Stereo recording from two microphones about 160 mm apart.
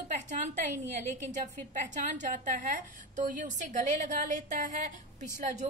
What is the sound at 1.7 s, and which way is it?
A woman's voice, 50° right (ahead or behind).